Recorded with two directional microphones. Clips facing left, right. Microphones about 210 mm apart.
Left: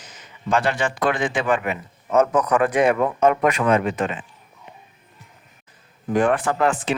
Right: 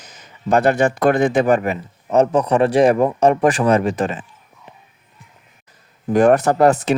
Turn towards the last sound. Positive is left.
turn(degrees=-40)  # may be behind; listen again after turning